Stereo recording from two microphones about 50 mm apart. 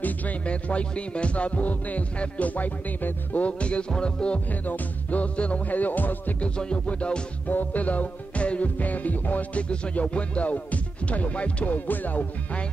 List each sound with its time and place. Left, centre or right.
0.0 s music: left
4.5 s music: left
6.4 s music: centre
7.4 s music: left